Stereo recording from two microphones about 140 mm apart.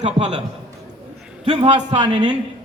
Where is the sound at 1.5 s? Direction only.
40° right (ahead or behind).